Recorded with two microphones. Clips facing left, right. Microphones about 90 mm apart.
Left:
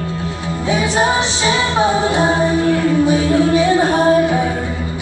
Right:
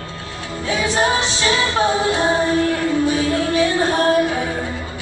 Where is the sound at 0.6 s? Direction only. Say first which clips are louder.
Left 3 dB; 20° left (ahead or behind).